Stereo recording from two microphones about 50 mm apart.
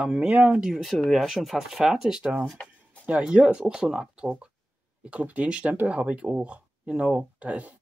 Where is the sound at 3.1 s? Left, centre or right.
Right.